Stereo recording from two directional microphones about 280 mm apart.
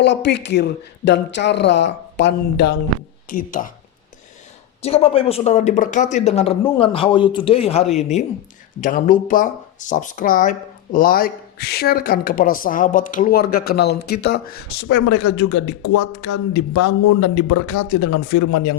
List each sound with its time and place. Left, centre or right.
0.0 s speech: left
4.8 s speech: left
14.8 s speech: left